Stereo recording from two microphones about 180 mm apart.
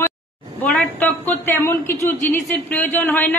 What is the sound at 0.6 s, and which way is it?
A man's voice, 5° left (ahead or behind).